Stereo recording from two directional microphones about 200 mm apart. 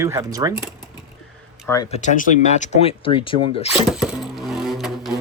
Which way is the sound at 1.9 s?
35° left (ahead or behind).